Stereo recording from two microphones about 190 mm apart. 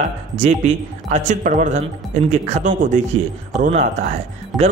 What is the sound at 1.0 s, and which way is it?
Speech, 40° right (ahead or behind).